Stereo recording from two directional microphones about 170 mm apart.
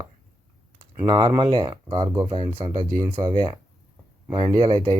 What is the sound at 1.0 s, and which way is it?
Speech, 25° right (ahead or behind).